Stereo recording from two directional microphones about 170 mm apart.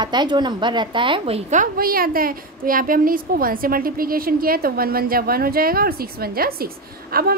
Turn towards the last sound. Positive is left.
turn(degrees=-60)  # may be behind; listen again after turning